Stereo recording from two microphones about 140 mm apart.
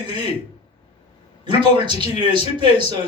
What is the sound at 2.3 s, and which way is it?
Speech, 35° right (ahead or behind).